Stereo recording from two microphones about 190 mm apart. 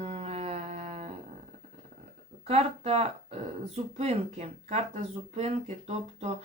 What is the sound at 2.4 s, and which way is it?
Speech, 35° right (ahead or behind).